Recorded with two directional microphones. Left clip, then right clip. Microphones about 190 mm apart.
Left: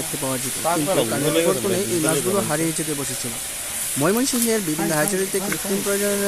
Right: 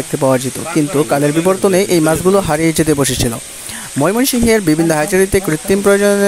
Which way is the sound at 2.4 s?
50° right (ahead or behind).